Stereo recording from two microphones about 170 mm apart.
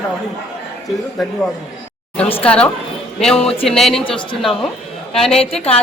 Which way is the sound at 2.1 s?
5° left (ahead or behind).